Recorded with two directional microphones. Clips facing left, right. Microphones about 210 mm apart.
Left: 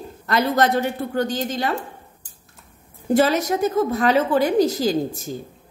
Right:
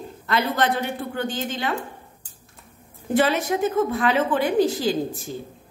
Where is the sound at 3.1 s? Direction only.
40° left (ahead or behind).